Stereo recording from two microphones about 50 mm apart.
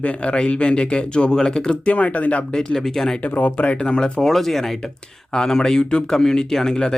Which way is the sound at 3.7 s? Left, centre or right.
Centre.